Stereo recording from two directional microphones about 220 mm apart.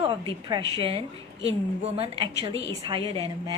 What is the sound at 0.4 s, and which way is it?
A woman's voice, 20° right (ahead or behind).